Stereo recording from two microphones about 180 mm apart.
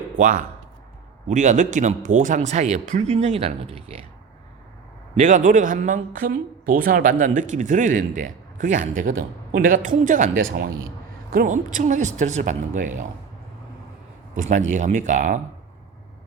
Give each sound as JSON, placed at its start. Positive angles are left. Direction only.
{"t": 0.2, "sound": "speech", "side_deg": -50}
{"t": 5.1, "sound": "speech", "side_deg": -40}
{"t": 14.7, "sound": "speech", "side_deg": -45}